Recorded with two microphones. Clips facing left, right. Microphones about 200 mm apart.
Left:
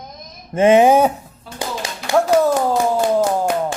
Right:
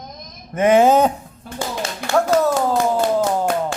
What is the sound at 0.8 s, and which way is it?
Speech, 10° left (ahead or behind).